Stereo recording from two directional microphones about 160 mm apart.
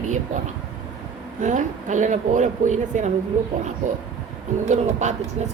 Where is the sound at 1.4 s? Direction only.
50° right (ahead or behind).